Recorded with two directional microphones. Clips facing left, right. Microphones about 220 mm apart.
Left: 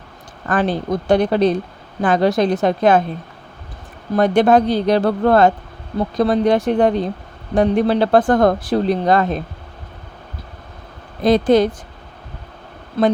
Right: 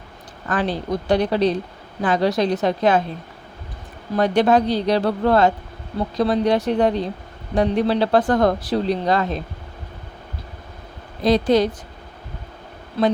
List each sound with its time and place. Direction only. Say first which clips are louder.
0.4 s speech: left 4 dB; 50° left (ahead or behind)
4.1 s speech: left 3 dB; 50° left (ahead or behind)
11.2 s speech: left 3 dB; 50° left (ahead or behind)